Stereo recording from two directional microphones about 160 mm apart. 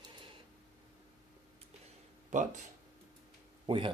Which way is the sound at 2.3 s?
50° right (ahead or behind).